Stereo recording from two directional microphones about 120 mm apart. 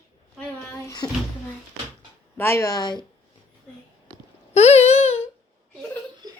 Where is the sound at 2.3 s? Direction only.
20° left (ahead or behind).